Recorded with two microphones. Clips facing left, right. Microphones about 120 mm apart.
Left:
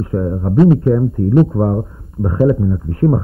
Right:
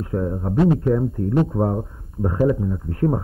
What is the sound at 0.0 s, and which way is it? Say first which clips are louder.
Speech: left 5 dB; 25° left (ahead or behind).